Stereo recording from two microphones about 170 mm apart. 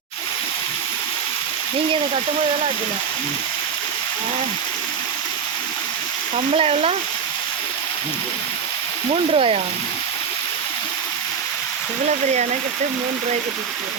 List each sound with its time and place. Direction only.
6.6 s speech: 35° right (ahead or behind)
9.3 s speech: 35° right (ahead or behind)